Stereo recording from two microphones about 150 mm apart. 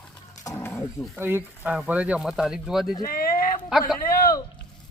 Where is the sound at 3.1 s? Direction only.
75° left (ahead or behind).